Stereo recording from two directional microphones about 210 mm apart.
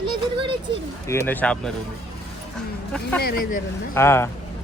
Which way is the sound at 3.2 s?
45° left (ahead or behind).